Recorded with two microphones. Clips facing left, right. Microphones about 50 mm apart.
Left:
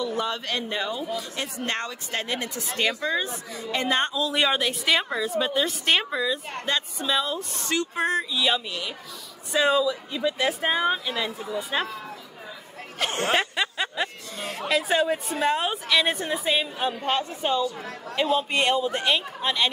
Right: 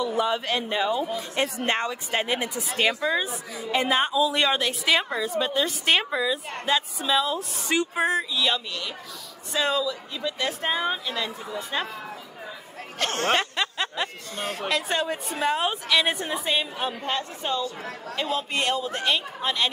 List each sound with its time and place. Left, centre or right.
0.0 s speech: centre
1.1 s speech: right
1.8 s speech: centre
7.7 s speech: centre
8.0 s a woman's voice: centre
13.1 s snicker: centre
14.0 s music: centre
14.7 s speech: centre
17.0 s a woman's voice: centre